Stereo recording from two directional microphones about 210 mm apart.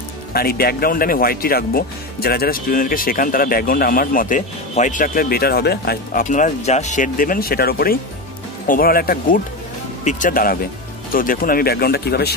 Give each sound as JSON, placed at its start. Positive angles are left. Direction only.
{"t": 0.3, "sound": "speech", "side_deg": 45}